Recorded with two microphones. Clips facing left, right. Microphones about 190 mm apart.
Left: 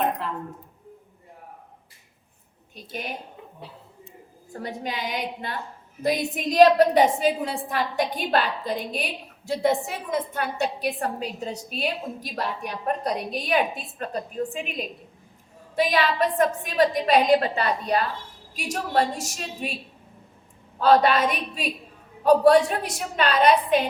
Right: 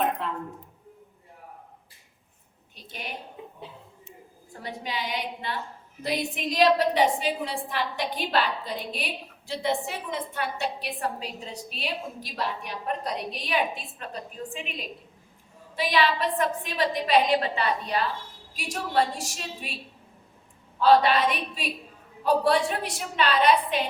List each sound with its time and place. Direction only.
4.6 s a woman's voice: 45° left (ahead or behind)
20.7 s a woman's voice: 45° left (ahead or behind)